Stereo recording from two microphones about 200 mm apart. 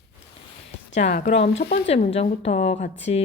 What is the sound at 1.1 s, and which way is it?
Speech, 40° left (ahead or behind).